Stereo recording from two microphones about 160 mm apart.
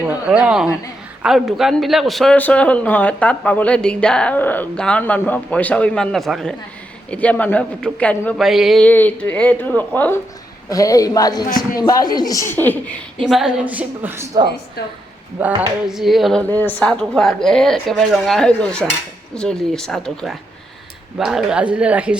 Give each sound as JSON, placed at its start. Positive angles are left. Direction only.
{"t": 0.0, "sound": "a woman's voice", "side_deg": -10}
{"t": 8.9, "sound": "a man's voice", "side_deg": 10}
{"t": 10.7, "sound": "a woman's voice", "side_deg": 20}
{"t": 11.4, "sound": "music", "side_deg": 60}
{"t": 11.8, "sound": "a woman's voice", "side_deg": 25}
{"t": 13.2, "sound": "a woman's voice", "side_deg": 0}
{"t": 15.9, "sound": "a woman's voice", "side_deg": 0}